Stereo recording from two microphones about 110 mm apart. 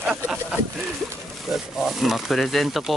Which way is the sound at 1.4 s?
Centre (ahead or behind).